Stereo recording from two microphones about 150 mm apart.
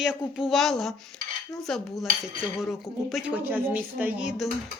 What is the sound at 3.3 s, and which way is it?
A woman's voice, 10° right (ahead or behind).